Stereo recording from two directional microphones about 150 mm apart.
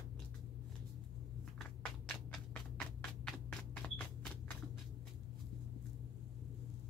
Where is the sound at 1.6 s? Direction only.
5° left (ahead or behind).